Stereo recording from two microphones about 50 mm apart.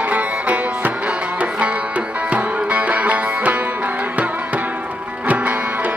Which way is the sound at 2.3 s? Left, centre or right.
Right.